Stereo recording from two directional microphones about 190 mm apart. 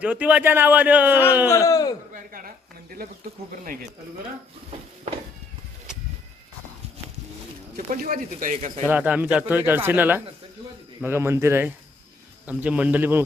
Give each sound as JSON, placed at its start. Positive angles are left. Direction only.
{"t": 0.0, "sound": "speech", "side_deg": -5}
{"t": 1.5, "sound": "speech", "side_deg": 15}
{"t": 2.1, "sound": "a sound", "side_deg": -45}
{"t": 3.6, "sound": "speech", "side_deg": -45}
{"t": 7.9, "sound": "speech", "side_deg": -45}
{"t": 8.9, "sound": "speech", "side_deg": -10}